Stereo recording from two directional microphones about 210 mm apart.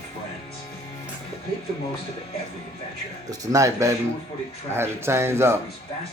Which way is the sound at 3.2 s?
15° right (ahead or behind).